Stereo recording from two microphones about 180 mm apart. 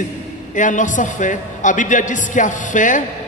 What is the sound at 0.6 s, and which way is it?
A man's voice, 45° left (ahead or behind).